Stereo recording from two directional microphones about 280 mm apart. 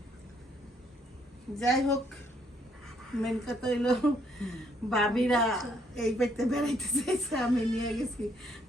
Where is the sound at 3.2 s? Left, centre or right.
Centre.